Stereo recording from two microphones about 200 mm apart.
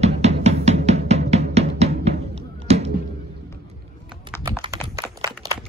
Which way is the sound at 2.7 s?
30° right (ahead or behind).